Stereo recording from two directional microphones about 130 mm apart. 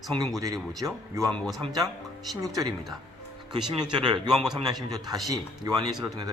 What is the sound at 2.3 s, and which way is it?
Speech, 30° right (ahead or behind).